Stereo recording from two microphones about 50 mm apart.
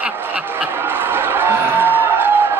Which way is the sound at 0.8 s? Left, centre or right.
Right.